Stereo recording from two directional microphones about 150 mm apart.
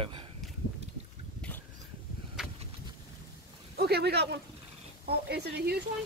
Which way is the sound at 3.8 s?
90° right.